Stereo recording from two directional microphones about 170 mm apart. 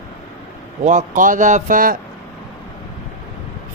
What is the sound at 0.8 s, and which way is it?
Speech, 50° right (ahead or behind).